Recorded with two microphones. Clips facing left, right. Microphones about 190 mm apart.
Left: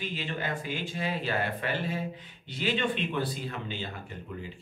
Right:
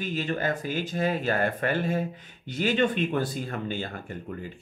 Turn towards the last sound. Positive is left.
turn(degrees=-50)  # may be behind; listen again after turning